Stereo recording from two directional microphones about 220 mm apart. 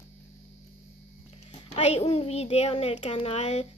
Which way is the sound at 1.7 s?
30° left (ahead or behind).